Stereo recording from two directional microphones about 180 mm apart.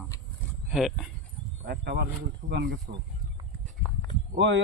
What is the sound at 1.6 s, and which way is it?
Speech, 65° right (ahead or behind).